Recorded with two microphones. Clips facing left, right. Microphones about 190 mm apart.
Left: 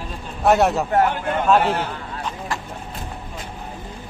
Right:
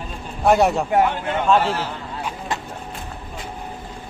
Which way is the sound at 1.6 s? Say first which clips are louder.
Left 1 dB; 55° left (ahead or behind).